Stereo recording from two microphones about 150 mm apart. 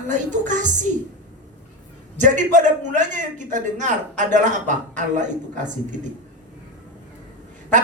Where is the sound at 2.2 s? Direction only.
55° right (ahead or behind).